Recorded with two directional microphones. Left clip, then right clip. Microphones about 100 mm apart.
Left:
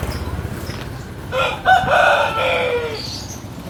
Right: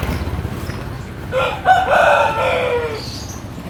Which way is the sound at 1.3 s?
35° left (ahead or behind).